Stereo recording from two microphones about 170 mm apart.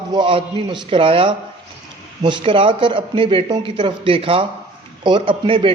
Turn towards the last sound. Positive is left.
turn(degrees=-30)  # may be behind; listen again after turning